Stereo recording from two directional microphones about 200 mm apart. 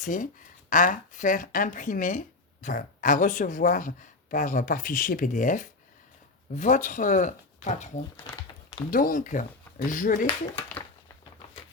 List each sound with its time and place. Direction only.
0.0 s speech: 40° left (ahead or behind)